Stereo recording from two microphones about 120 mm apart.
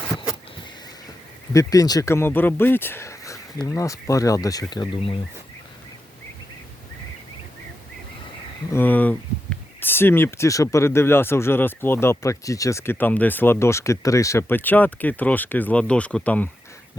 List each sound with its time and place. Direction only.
1.5 s speech: 30° left (ahead or behind)
8.7 s speech: 15° left (ahead or behind)